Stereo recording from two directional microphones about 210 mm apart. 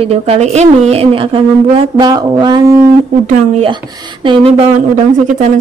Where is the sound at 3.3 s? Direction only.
35° right (ahead or behind).